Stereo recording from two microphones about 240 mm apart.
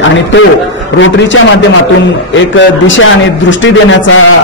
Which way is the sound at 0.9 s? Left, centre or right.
Left.